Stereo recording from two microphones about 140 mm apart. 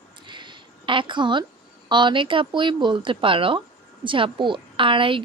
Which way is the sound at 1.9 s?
35° right (ahead or behind).